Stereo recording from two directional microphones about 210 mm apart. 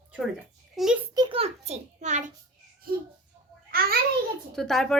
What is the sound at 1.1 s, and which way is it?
A child's voice, 25° right (ahead or behind).